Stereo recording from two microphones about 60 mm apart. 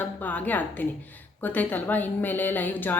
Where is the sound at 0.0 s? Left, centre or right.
Left.